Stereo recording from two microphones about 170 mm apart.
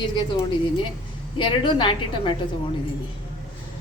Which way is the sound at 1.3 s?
30° left (ahead or behind).